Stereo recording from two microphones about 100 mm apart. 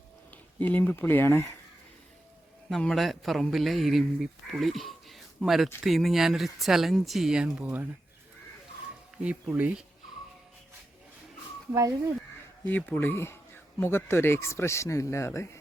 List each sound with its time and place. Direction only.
0.3 s speech: 15° left (ahead or behind)
2.6 s a man's voice: centre (ahead or behind)
9.1 s speech: 15° right (ahead or behind)
11.7 s speech: 35° right (ahead or behind)
12.6 s speech: 20° left (ahead or behind)